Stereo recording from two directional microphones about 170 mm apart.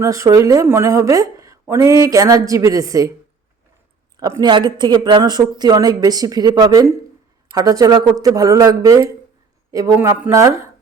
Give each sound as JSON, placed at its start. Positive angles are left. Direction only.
{"t": 0.0, "sound": "speech", "side_deg": -20}
{"t": 4.2, "sound": "a woman's voice", "side_deg": -20}